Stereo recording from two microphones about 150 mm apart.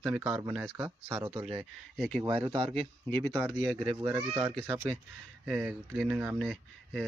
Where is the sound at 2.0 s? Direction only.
Centre (ahead or behind).